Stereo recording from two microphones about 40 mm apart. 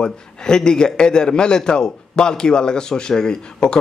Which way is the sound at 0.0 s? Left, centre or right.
Centre.